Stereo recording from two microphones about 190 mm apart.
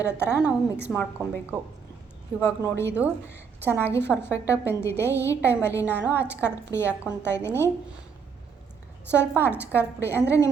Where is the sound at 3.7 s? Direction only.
10° left (ahead or behind).